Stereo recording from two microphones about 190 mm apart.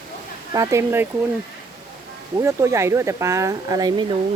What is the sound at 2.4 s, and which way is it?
Speech, 15° right (ahead or behind).